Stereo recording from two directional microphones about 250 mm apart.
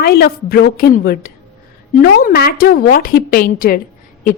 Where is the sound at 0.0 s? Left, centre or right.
Left.